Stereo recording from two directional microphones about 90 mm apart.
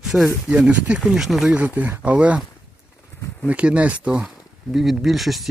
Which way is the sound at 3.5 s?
15° right (ahead or behind).